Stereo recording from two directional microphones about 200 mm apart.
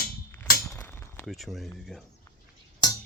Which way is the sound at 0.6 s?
10° left (ahead or behind).